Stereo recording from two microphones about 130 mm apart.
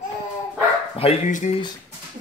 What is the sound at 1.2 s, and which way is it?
Speech, 75° left (ahead or behind).